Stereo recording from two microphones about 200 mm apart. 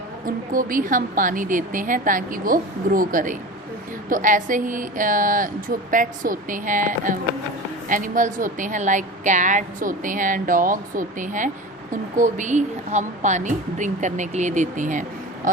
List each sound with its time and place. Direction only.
0.3 s a woman's voice: 45° right (ahead or behind)